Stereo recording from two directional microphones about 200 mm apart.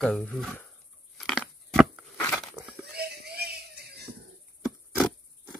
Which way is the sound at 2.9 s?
55° right (ahead or behind).